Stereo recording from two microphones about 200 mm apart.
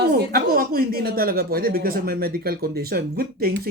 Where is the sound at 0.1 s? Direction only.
50° right (ahead or behind).